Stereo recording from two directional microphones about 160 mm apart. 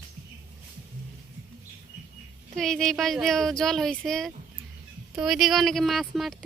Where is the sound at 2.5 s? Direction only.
5° left (ahead or behind).